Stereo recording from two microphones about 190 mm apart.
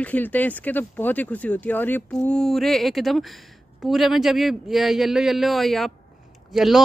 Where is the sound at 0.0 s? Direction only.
10° left (ahead or behind).